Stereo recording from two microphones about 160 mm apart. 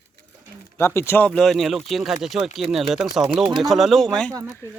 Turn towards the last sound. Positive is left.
turn(degrees=5)  # may be behind; listen again after turning